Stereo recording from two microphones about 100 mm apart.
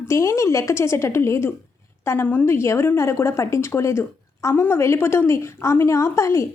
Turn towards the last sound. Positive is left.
turn(degrees=30)  # may be behind; listen again after turning